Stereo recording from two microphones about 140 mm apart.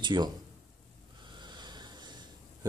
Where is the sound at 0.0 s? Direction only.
35° right (ahead or behind).